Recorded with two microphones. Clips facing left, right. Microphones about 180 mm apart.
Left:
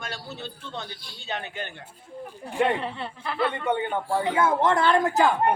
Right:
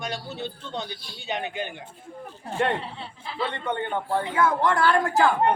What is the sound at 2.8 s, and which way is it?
Speech, 60° left (ahead or behind).